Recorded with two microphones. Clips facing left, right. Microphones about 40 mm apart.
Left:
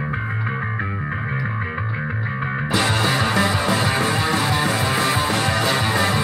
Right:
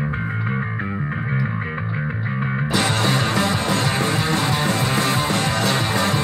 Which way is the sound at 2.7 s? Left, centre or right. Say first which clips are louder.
Even; centre.